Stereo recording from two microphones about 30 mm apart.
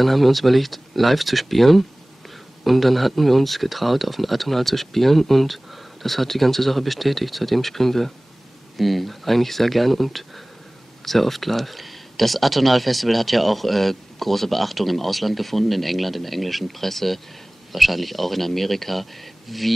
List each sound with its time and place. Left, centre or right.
0.0 s speech: centre